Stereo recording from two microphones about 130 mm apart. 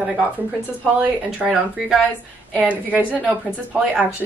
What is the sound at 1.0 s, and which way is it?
Speech, centre (ahead or behind).